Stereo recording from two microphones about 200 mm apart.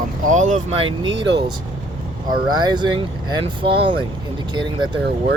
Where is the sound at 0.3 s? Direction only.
40° right (ahead or behind).